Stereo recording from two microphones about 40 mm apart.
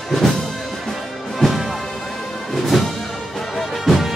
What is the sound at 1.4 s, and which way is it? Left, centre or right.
Music, centre.